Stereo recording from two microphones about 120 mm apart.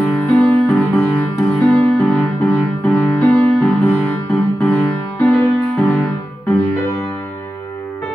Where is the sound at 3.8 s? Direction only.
25° left (ahead or behind).